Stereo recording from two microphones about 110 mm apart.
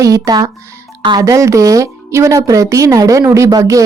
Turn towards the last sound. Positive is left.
turn(degrees=-30)  # may be behind; listen again after turning